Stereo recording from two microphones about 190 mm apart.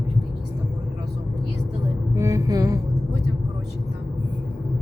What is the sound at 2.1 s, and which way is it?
Music, 15° right (ahead or behind).